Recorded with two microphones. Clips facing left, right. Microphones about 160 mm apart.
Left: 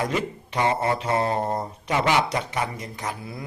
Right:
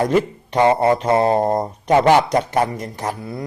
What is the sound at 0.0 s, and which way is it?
A man's voice, 45° right (ahead or behind).